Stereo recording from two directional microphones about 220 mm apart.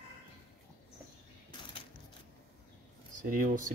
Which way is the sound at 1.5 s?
20° left (ahead or behind).